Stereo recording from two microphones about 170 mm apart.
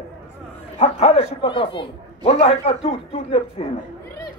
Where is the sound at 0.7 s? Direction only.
40° left (ahead or behind).